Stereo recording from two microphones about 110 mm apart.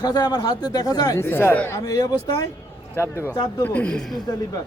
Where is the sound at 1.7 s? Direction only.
35° left (ahead or behind).